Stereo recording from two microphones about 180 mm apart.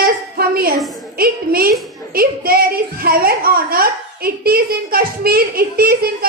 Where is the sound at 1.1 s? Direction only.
55° right (ahead or behind).